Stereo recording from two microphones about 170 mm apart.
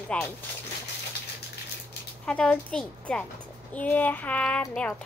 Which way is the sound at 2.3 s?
5° left (ahead or behind).